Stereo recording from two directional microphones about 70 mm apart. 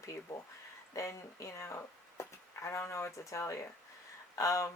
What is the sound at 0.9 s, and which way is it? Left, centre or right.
Speech, left.